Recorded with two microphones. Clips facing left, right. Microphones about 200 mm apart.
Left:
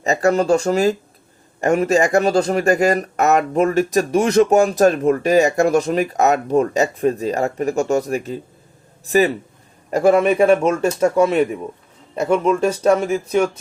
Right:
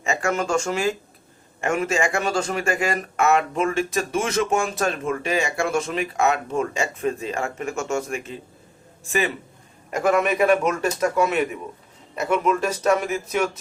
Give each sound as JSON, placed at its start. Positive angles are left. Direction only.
{"t": 0.0, "sound": "speech", "side_deg": 35}